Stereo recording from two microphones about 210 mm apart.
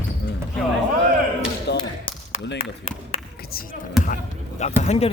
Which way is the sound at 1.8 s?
25° left (ahead or behind).